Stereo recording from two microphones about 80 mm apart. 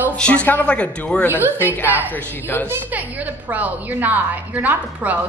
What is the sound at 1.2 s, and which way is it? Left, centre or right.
Speech, right.